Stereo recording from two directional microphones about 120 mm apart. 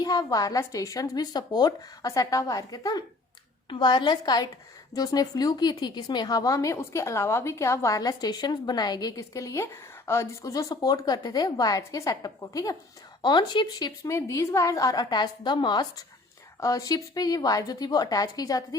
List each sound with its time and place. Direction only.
0.0 s a woman's voice: 30° left (ahead or behind)